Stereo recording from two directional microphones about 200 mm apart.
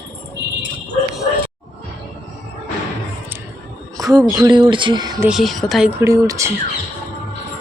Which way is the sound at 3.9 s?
15° right (ahead or behind).